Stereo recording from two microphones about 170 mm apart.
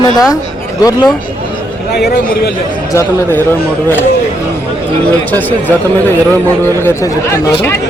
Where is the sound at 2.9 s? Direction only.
15° left (ahead or behind).